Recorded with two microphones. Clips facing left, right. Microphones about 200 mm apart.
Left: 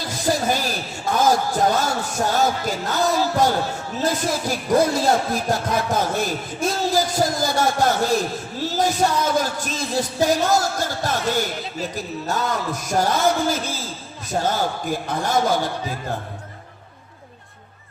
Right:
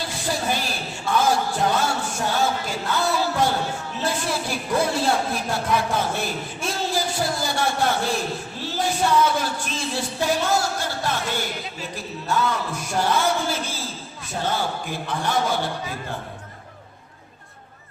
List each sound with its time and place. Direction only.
0.0 s a sound: 40° left (ahead or behind)
4.0 s music: 40° left (ahead or behind)
14.3 s a man's voice: 40° left (ahead or behind)